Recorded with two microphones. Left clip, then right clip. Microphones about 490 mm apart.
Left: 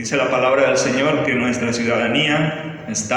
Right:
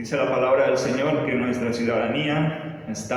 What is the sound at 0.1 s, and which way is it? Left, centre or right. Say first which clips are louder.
A man's voice: left 4 dB; centre.